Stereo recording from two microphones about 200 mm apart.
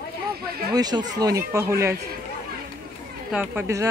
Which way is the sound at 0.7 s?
20° right (ahead or behind).